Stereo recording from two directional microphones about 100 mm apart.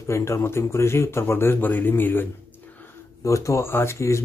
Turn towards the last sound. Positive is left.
turn(degrees=30)  # may be behind; listen again after turning